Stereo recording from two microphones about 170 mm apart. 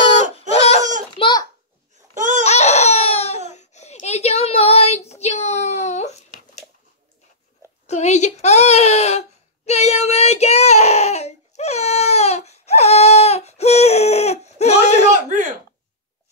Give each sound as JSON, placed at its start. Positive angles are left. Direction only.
{"t": 0.5, "sound": "baby cry", "side_deg": 35}
{"t": 1.1, "sound": "babbling", "side_deg": 25}
{"t": 2.1, "sound": "laughter", "side_deg": -50}
{"t": 2.4, "sound": "a sound", "side_deg": 40}
{"t": 7.8, "sound": "a sound", "side_deg": 40}
{"t": 9.7, "sound": "child singing", "side_deg": 40}